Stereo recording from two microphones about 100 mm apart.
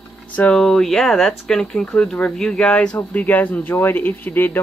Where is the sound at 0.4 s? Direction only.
10° left (ahead or behind).